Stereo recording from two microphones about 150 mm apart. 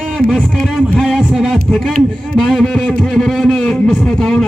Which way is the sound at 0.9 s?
5° left (ahead or behind).